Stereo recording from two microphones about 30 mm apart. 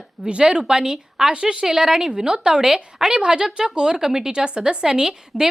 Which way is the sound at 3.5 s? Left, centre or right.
Right.